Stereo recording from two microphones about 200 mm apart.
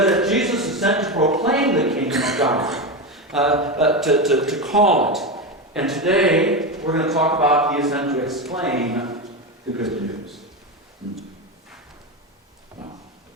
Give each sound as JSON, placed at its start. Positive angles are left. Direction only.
{"t": 0.0, "sound": "a sound", "side_deg": 0}
{"t": 3.1, "sound": "speech", "side_deg": 0}
{"t": 9.8, "sound": "a man's voice", "side_deg": 0}